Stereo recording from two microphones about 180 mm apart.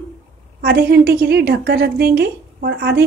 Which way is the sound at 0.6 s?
60° right (ahead or behind).